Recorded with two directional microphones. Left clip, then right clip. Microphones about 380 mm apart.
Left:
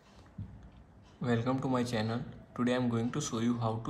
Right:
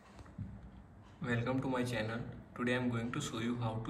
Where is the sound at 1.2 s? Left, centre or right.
Centre.